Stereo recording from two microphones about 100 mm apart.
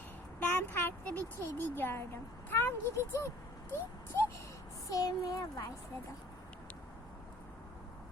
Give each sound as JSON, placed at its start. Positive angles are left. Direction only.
{"t": 0.3, "sound": "speech", "side_deg": 15}
{"t": 4.9, "sound": "speech", "side_deg": 35}